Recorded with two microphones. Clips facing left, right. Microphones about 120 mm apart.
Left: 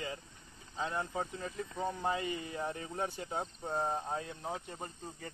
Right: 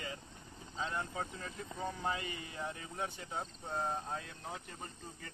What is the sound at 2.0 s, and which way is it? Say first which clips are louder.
Speech: left 4 dB; 35° left (ahead or behind).